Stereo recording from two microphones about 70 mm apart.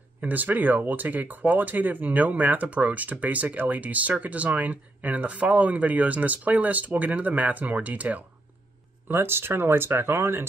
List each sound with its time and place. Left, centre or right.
0.2 s speech: right
9.0 s speech: right